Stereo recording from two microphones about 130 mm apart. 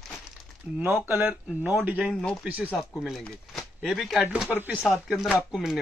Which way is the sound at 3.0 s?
Centre (ahead or behind).